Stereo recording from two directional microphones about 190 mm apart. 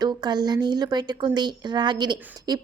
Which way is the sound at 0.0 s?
20° right (ahead or behind).